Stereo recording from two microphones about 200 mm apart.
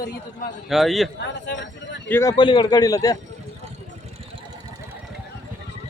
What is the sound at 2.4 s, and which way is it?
Speech, 25° left (ahead or behind).